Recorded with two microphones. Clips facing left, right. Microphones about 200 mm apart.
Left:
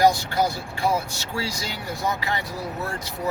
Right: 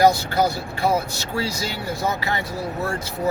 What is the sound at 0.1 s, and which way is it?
Speech, 15° left (ahead or behind).